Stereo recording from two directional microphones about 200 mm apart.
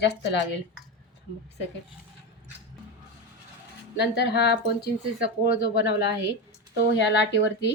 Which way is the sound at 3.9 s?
55° left (ahead or behind).